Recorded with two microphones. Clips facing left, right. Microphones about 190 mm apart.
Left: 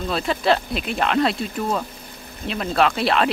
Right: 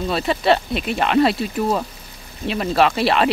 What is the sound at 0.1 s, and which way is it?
Speech, centre (ahead or behind).